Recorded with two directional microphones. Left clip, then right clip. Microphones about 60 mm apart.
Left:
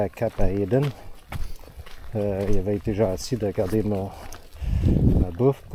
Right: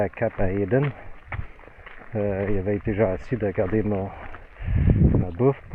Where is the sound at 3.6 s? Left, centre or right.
Left.